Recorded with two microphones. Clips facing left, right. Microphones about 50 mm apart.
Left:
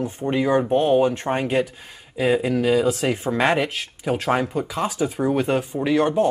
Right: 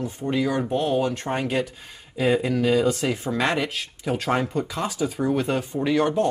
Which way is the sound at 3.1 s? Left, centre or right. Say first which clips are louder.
Left 4 dB; left.